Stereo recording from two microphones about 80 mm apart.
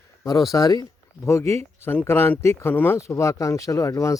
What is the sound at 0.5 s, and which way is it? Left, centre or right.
Speech, left.